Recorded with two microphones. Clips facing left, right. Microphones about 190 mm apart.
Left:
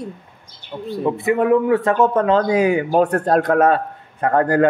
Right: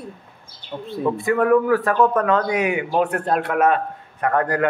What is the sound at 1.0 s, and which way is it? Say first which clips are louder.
Speech: left 1 dB; 20° left (ahead or behind).